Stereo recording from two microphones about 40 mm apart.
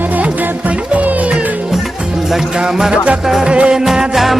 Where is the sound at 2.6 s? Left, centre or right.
Centre.